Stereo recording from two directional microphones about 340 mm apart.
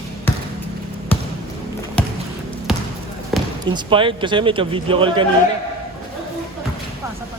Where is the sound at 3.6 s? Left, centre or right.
Centre.